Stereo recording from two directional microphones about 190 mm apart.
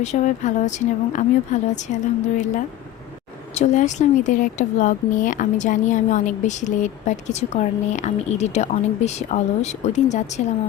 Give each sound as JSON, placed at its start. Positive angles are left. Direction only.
{"t": 0.0, "sound": "speech", "side_deg": 40}